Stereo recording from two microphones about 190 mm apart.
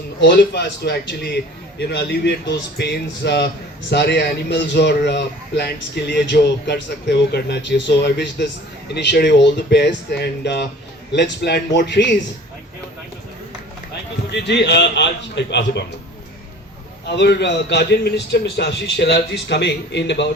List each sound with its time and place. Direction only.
0.2 s a man's voice: 65° left (ahead or behind)
14.3 s a man's voice: 65° left (ahead or behind)
17.1 s a man's voice: 65° left (ahead or behind)